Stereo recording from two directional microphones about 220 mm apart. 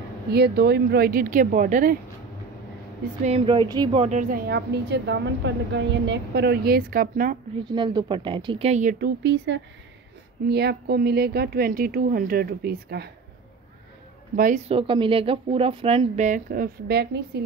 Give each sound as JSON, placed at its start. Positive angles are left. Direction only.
{"t": 0.3, "sound": "a woman's voice", "side_deg": -45}
{"t": 3.3, "sound": "a woman's voice", "side_deg": -25}
{"t": 7.7, "sound": "speech", "side_deg": -20}
{"t": 9.2, "sound": "a woman's voice", "side_deg": -55}
{"t": 14.3, "sound": "a woman's voice", "side_deg": -40}
{"t": 14.7, "sound": "speech", "side_deg": -25}